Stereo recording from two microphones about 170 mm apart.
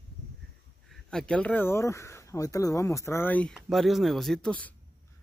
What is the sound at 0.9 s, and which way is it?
Speech, 5° left (ahead or behind).